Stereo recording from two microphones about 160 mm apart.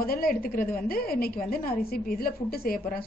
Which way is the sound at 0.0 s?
65° left (ahead or behind).